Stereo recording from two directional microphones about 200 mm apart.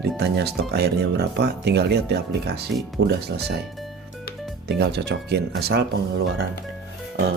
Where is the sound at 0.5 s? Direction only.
55° right (ahead or behind).